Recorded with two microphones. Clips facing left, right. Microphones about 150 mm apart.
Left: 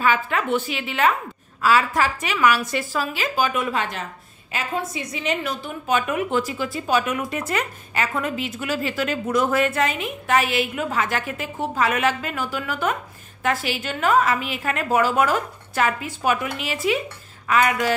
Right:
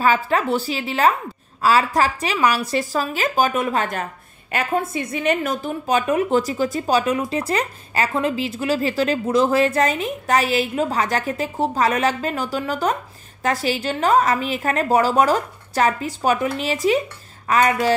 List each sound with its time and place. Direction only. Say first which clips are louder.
0.0 s a woman's voice: right 3 dB; 35° right (ahead or behind)